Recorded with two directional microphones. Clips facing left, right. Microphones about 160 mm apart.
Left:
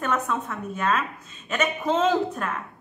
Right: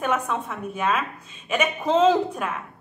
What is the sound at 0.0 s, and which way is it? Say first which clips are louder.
A woman's voice: right 1 dB; 10° right (ahead or behind).